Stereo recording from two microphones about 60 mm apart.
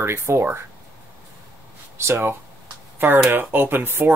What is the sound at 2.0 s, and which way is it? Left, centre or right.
Speech, right.